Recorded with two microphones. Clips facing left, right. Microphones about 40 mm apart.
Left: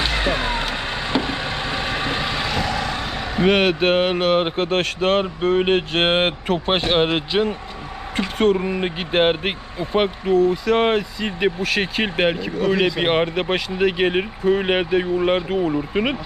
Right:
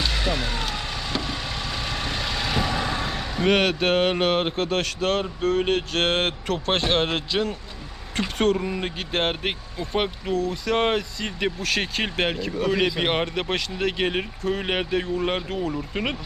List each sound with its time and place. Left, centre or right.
0.0 s vehicle: left
3.5 s speech: centre